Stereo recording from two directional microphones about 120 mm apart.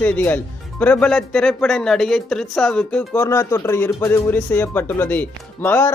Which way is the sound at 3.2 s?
25° left (ahead or behind).